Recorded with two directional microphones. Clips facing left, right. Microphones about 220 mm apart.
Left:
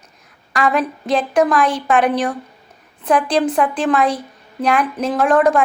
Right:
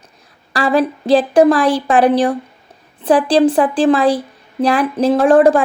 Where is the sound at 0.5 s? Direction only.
30° right (ahead or behind).